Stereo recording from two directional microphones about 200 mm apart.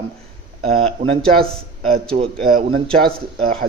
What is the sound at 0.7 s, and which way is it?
Speech, 30° right (ahead or behind).